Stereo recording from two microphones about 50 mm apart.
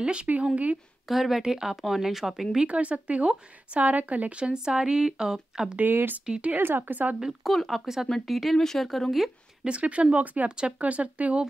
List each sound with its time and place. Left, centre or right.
0.0 s speech: right
1.0 s speech: centre
2.5 s speech: right
5.8 s speech: right
6.2 s speech: centre
6.5 s speech: right
6.8 s speech: right
7.4 s speech: centre
9.7 s speech: right